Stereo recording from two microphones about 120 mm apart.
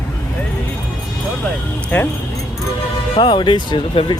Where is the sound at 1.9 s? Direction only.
10° left (ahead or behind).